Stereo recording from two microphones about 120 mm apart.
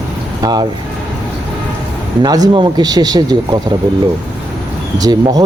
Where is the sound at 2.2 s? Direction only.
35° right (ahead or behind).